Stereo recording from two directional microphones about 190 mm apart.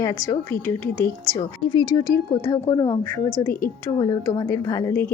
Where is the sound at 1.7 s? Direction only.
20° left (ahead or behind).